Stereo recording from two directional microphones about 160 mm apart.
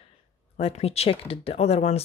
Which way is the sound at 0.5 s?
40° left (ahead or behind).